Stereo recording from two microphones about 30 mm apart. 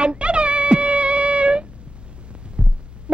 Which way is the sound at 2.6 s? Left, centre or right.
Right.